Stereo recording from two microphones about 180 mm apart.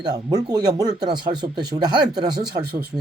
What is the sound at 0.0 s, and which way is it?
Speech, 20° right (ahead or behind).